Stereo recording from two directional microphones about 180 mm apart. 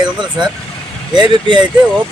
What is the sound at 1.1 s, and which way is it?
Speech, 25° right (ahead or behind).